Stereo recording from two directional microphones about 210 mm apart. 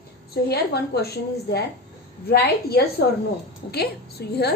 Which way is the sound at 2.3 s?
50° left (ahead or behind).